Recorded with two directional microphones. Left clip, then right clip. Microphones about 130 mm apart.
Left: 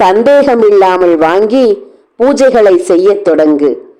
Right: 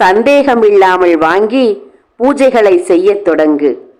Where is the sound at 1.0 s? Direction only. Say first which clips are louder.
Left 1 dB; 15° left (ahead or behind).